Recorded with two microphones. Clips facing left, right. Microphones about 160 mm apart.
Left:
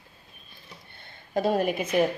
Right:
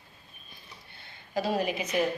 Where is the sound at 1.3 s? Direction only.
50° left (ahead or behind).